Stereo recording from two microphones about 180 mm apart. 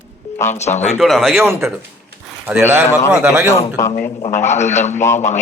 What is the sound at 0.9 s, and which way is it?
Speech, centre (ahead or behind).